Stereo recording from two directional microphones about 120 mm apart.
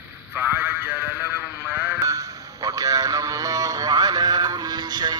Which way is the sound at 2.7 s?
30° right (ahead or behind).